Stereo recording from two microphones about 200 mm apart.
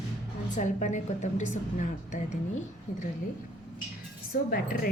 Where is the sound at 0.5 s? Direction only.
40° left (ahead or behind).